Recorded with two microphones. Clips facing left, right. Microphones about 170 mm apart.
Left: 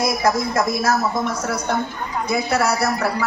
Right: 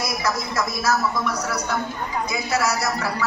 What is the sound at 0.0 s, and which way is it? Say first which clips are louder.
Speech: left 6 dB; 55° left (ahead or behind).